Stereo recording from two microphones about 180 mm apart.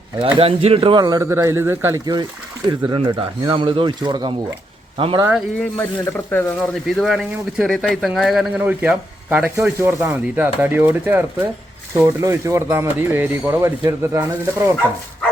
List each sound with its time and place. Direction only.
0.2 s speech: 30° right (ahead or behind)
5.7 s speech: 10° left (ahead or behind)
6.6 s speech: centre (ahead or behind); by 14.7 s 15° right (ahead or behind)